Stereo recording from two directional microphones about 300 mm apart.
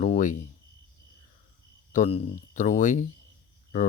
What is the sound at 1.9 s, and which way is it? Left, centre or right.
Speech, left.